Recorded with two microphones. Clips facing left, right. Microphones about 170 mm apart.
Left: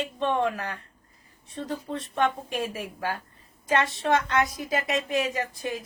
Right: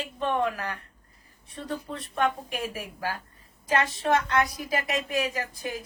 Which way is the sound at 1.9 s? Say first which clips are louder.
Left 1 dB; 20° left (ahead or behind).